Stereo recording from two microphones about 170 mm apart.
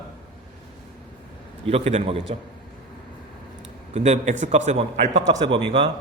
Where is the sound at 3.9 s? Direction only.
40° right (ahead or behind).